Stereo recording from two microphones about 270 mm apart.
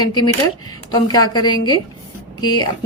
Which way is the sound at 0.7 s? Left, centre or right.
Centre.